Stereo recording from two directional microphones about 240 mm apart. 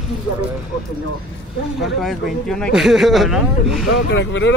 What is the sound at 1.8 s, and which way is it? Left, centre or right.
Speech, centre.